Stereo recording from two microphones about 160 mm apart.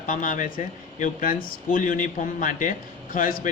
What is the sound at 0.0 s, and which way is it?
Speech, 55° left (ahead or behind).